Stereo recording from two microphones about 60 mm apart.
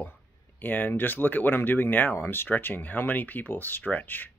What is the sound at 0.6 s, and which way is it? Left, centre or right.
Speech, left.